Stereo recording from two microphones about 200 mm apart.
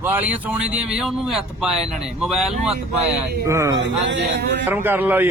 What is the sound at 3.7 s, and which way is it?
Speech, 65° right (ahead or behind).